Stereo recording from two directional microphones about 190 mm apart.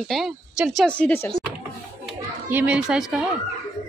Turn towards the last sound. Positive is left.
turn(degrees=-5)  # may be behind; listen again after turning